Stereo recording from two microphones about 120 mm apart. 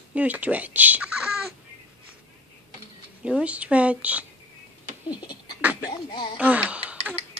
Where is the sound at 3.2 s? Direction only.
10° right (ahead or behind).